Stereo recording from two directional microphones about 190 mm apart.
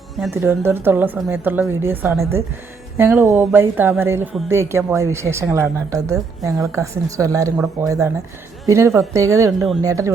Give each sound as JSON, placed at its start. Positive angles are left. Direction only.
{"t": 0.3, "sound": "a man's voice", "side_deg": -10}